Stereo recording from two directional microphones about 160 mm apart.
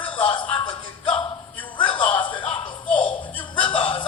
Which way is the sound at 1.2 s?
30° left (ahead or behind).